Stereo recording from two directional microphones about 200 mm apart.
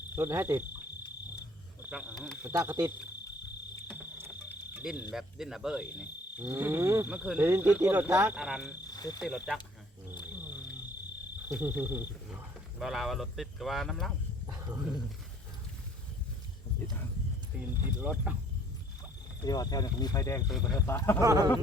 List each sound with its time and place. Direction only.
0.2 s speech: 10° right (ahead or behind)
1.8 s speech: 5° right (ahead or behind)
3.8 s cricket: 10° right (ahead or behind)
4.8 s speech: 5° right (ahead or behind)
8.6 s cricket: 20° left (ahead or behind)
9.2 s speech: 5° right (ahead or behind)
10.2 s cricket: 20° left (ahead or behind)
11.4 s speech: 10° right (ahead or behind)
14.4 s dog: 15° right (ahead or behind)
17.5 s speech: 5° right (ahead or behind)
19.5 s speech: 20° left (ahead or behind)
21.2 s speech: 20° right (ahead or behind)